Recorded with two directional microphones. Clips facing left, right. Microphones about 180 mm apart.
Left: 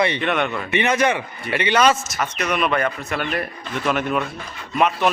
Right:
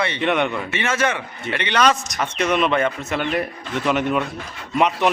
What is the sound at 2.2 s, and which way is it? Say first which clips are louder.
Speech: right 2 dB; 30° right (ahead or behind).